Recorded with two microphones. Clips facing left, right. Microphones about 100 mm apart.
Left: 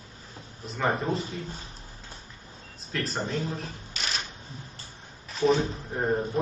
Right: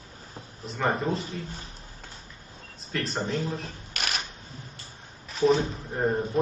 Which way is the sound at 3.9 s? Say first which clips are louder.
Right 2 dB; 60° right (ahead or behind).